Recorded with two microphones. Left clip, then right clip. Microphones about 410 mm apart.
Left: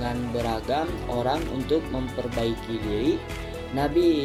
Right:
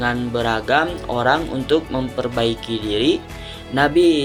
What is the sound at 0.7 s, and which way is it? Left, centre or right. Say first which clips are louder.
Speech: right 8 dB; left.